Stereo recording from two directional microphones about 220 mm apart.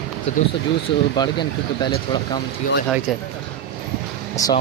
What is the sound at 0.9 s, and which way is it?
Speech, 20° left (ahead or behind).